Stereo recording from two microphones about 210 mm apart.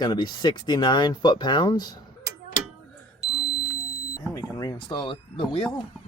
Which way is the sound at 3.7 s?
15° left (ahead or behind).